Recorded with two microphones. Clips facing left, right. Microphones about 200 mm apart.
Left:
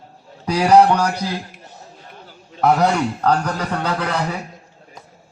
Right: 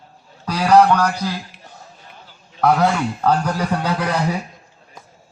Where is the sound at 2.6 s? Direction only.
Centre (ahead or behind); by 4.4 s 15° right (ahead or behind).